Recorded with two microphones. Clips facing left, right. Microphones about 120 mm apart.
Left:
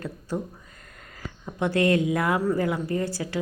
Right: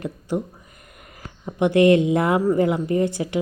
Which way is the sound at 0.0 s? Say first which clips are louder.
Right 5 dB; 15° right (ahead or behind).